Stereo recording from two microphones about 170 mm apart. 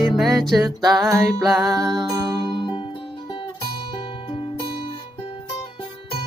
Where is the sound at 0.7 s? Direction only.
25° right (ahead or behind).